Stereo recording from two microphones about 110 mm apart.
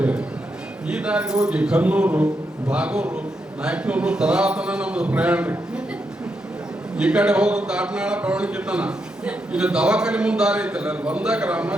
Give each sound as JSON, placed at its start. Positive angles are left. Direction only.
{"t": 0.0, "sound": "a sound", "side_deg": -10}
{"t": 0.9, "sound": "a man's voice", "side_deg": -10}
{"t": 6.9, "sound": "a man's voice", "side_deg": -10}